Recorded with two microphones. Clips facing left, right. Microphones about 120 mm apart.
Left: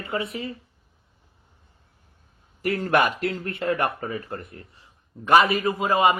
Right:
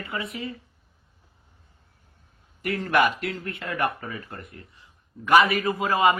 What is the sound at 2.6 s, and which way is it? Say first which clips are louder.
A man's voice: left 1 dB; 35° left (ahead or behind).